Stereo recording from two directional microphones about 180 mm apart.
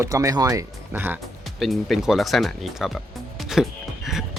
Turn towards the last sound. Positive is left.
turn(degrees=0)  # may be behind; listen again after turning